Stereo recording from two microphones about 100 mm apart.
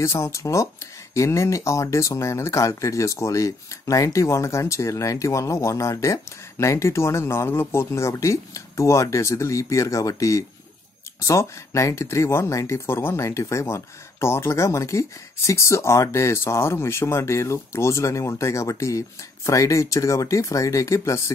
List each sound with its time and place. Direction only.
0.0 s speech: 25° left (ahead or behind)